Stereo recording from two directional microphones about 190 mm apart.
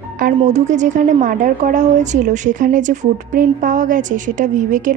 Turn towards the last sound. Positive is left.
turn(degrees=-40)  # may be behind; listen again after turning